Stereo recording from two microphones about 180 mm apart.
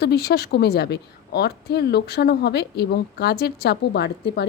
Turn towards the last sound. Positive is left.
turn(degrees=65)  # may be behind; listen again after turning